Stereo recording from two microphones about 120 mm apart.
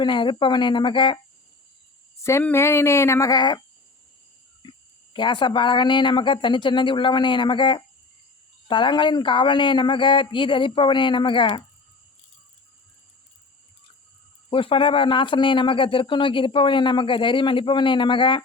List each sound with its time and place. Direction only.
0.0 s a man's voice: 40° left (ahead or behind)
2.4 s a sound: 20° left (ahead or behind); by 3.6 s 35° left (ahead or behind)
5.1 s a man's voice: 40° left (ahead or behind)
14.5 s speech: 45° left (ahead or behind)